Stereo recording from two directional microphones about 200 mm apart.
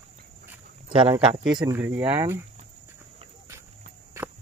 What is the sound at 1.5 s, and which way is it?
Speech, 25° right (ahead or behind).